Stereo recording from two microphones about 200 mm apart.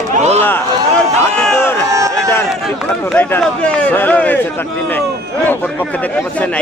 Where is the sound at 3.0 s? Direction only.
10° left (ahead or behind).